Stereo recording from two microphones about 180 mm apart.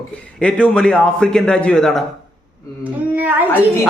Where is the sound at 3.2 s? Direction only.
10° right (ahead or behind).